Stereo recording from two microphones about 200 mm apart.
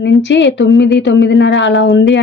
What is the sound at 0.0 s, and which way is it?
A woman's voice, 60° left (ahead or behind).